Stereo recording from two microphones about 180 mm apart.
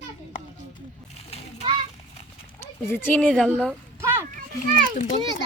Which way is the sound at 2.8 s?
10° left (ahead or behind).